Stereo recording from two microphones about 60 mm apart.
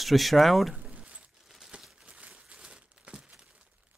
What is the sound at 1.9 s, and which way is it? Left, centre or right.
Crumpling, centre.